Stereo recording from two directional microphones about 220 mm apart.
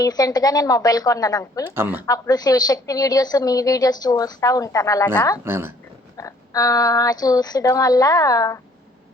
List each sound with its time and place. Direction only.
0.0 s a woman's voice: 15° left (ahead or behind)
1.7 s speech: 10° right (ahead or behind)
2.0 s a woman's voice: 15° left (ahead or behind)
5.5 s speech: 10° right (ahead or behind)
6.1 s a woman's voice: 15° left (ahead or behind)